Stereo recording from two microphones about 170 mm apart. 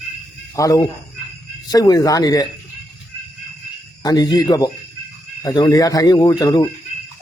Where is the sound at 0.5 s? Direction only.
20° left (ahead or behind).